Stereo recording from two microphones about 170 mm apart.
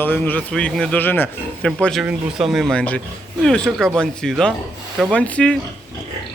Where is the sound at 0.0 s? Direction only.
10° left (ahead or behind).